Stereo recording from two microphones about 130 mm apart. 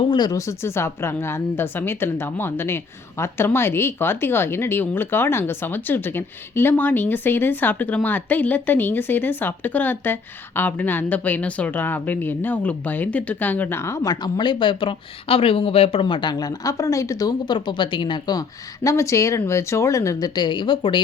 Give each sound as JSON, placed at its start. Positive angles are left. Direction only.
{"t": 0.1, "sound": "a woman's voice", "side_deg": 30}